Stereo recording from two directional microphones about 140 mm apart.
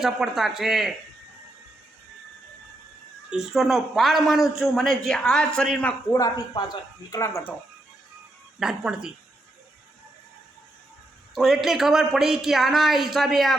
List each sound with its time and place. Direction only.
0.0 s a man's voice: 5° right (ahead or behind)
3.2 s a man's voice: 5° right (ahead or behind)
6.1 s speech: 25° left (ahead or behind)
8.5 s a man's voice: 5° right (ahead or behind)
11.3 s a man's voice: centre (ahead or behind)